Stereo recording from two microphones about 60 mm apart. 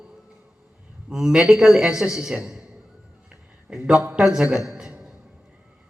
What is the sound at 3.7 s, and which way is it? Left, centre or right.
A man's voice, centre.